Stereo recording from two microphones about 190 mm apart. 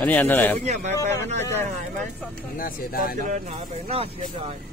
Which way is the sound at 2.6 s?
50° left (ahead or behind).